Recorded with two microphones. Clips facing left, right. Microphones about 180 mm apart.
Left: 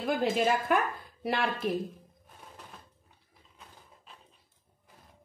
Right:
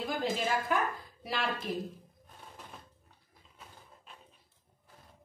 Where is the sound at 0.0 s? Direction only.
60° left (ahead or behind).